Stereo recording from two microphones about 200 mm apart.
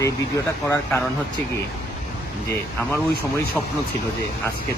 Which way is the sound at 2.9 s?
10° left (ahead or behind).